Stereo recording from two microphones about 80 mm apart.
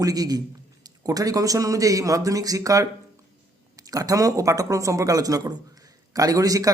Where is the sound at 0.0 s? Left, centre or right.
Right.